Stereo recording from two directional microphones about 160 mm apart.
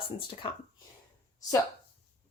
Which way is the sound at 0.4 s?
35° left (ahead or behind).